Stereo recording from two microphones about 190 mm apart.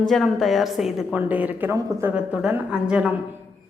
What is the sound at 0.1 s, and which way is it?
A woman's voice, centre (ahead or behind).